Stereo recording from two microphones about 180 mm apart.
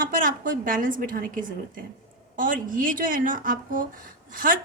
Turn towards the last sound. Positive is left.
turn(degrees=-50)  # may be behind; listen again after turning